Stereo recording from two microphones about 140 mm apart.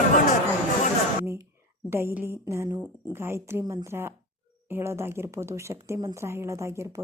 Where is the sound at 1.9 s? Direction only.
15° right (ahead or behind).